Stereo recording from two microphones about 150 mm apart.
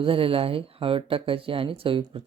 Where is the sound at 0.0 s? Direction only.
40° right (ahead or behind).